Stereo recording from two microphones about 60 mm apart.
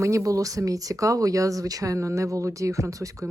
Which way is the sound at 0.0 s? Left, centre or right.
Right.